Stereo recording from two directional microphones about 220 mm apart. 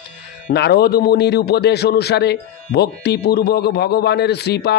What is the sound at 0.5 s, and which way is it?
A man's voice, 50° left (ahead or behind).